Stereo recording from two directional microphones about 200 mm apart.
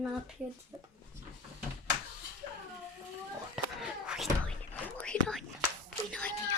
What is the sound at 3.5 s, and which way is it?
Thunk, 5° right (ahead or behind).